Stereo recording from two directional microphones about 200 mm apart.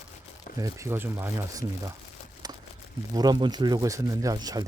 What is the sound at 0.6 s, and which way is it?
Speech, 15° right (ahead or behind).